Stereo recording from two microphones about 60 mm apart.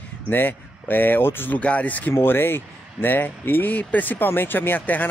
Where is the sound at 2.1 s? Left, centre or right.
Left.